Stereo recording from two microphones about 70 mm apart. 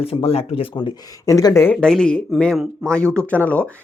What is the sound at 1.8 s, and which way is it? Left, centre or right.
Speech, centre.